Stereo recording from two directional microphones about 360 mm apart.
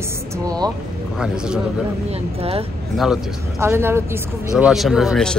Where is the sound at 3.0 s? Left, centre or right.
Centre.